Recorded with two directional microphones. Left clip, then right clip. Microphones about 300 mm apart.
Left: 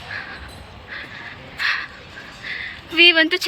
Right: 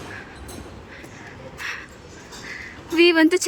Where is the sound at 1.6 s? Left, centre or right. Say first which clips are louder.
Left 10 dB; centre.